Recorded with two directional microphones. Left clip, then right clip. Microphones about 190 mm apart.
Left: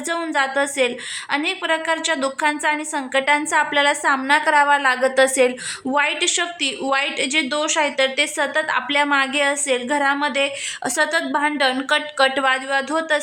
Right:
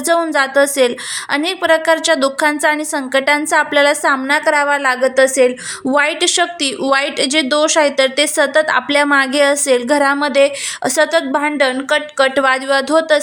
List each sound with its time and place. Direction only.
0.1 s speech: 20° right (ahead or behind)
5.9 s speech: 20° right (ahead or behind)